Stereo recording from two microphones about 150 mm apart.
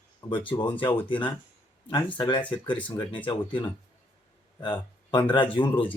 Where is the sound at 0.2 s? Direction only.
25° left (ahead or behind).